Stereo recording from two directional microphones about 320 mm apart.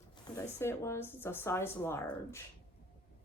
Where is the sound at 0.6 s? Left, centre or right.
Centre.